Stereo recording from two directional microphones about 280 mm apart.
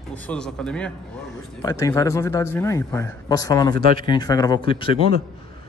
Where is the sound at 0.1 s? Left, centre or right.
Centre.